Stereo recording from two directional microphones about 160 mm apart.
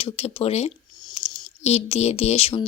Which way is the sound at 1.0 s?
25° left (ahead or behind).